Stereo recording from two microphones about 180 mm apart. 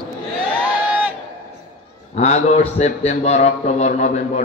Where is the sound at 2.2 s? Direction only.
40° left (ahead or behind).